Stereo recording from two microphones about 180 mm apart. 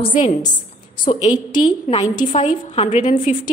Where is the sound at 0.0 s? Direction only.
30° left (ahead or behind).